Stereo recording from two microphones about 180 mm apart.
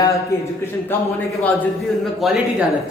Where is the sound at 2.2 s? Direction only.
Centre (ahead or behind).